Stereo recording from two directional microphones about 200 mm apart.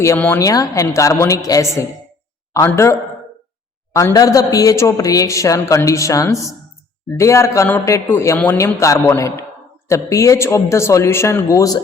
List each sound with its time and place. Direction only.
0.0 s a man's voice: 10° left (ahead or behind)